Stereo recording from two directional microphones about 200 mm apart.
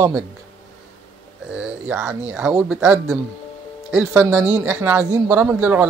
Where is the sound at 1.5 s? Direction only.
5° right (ahead or behind).